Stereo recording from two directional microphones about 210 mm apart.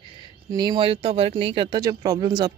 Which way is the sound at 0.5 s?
20° right (ahead or behind).